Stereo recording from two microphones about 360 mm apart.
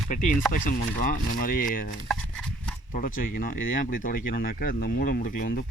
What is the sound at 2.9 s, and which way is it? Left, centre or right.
Speech, left.